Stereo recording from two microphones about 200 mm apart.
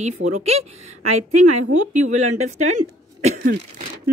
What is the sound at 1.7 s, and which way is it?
Speech, 35° right (ahead or behind).